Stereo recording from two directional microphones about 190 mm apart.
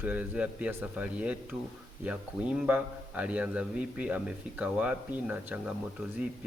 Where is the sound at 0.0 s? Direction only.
10° right (ahead or behind).